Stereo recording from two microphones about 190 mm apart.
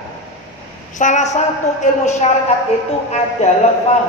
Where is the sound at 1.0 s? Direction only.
40° left (ahead or behind).